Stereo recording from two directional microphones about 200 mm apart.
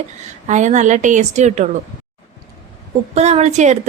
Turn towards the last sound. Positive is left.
turn(degrees=-35)  # may be behind; listen again after turning